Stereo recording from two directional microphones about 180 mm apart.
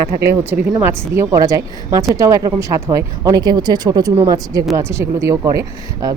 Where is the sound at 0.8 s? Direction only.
15° right (ahead or behind).